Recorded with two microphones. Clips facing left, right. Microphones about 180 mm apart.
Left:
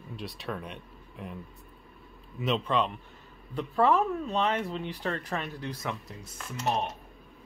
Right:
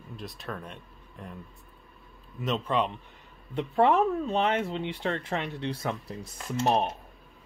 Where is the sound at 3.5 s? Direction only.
25° right (ahead or behind).